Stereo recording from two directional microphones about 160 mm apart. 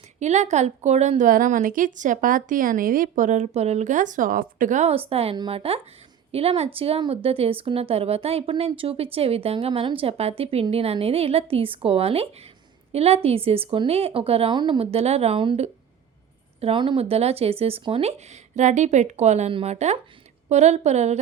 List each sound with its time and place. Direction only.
0.2 s a woman's voice: 45° right (ahead or behind)